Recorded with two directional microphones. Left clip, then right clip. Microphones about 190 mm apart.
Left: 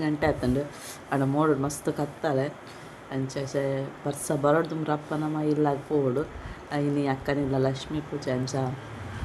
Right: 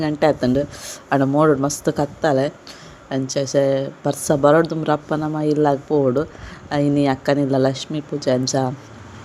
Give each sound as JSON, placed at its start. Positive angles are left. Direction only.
{"t": 0.0, "sound": "speech", "side_deg": -40}